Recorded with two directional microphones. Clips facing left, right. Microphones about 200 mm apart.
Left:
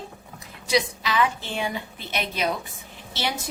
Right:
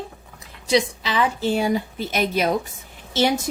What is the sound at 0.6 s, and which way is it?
A woman's voice, 30° right (ahead or behind).